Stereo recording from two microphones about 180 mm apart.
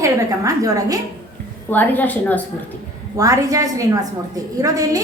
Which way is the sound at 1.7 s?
10° left (ahead or behind).